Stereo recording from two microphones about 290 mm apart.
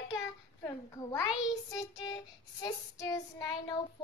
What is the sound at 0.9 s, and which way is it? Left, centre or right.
Child singing, centre.